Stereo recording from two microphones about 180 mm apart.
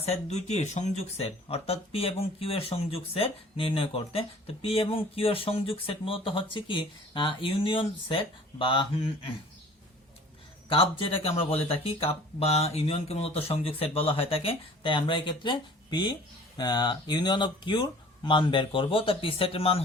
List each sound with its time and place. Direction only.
0.1 s speech: 40° left (ahead or behind)
10.7 s speech: 30° left (ahead or behind)